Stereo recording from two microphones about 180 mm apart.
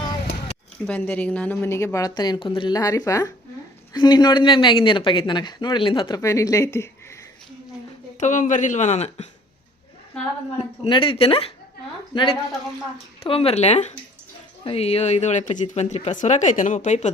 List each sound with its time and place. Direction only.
0.9 s speech: 10° left (ahead or behind)
8.2 s speech: 45° left (ahead or behind)
10.6 s speech: 30° left (ahead or behind)